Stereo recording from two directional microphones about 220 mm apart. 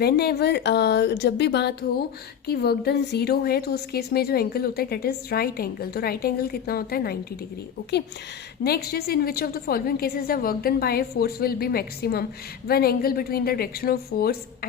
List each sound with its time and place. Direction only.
0.0 s speech: 45° left (ahead or behind)
8.6 s speech: 45° left (ahead or behind)